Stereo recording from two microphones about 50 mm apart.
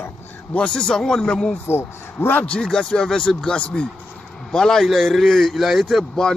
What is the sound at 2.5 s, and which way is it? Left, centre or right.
Speech, centre.